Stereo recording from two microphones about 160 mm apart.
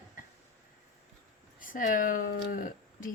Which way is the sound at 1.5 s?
60° left (ahead or behind).